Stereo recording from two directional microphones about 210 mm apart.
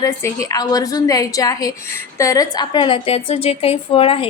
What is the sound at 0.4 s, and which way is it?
A woman's voice, 15° left (ahead or behind).